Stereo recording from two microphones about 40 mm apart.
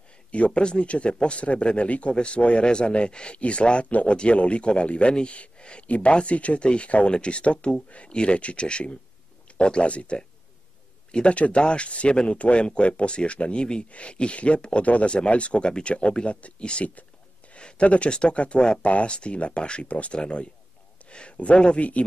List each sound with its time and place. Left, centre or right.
0.3 s speech: left